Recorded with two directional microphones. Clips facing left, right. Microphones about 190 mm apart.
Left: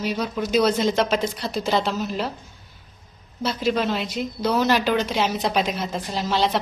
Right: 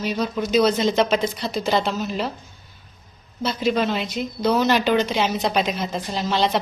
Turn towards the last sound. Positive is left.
turn(degrees=5)  # may be behind; listen again after turning